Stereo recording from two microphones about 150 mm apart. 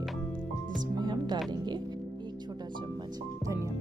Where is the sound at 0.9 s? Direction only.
30° right (ahead or behind).